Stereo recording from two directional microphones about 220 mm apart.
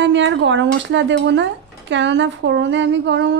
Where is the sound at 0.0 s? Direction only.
55° right (ahead or behind).